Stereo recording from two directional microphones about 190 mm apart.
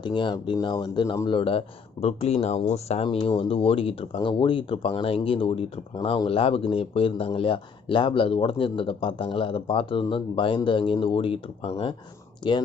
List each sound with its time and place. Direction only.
0.0 s speech: 25° left (ahead or behind)